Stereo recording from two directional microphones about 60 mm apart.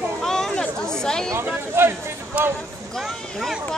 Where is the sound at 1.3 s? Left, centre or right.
Right.